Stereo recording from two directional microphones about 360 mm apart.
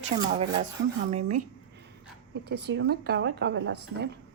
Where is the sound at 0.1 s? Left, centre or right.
Centre.